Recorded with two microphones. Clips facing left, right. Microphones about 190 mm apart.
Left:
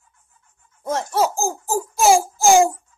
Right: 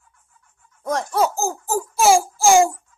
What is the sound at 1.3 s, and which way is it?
A child's voice, 10° left (ahead or behind).